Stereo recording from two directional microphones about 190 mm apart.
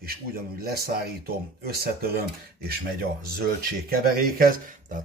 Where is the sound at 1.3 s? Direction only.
55° right (ahead or behind).